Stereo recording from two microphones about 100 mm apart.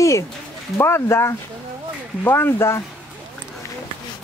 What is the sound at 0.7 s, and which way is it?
Speech, 25° left (ahead or behind).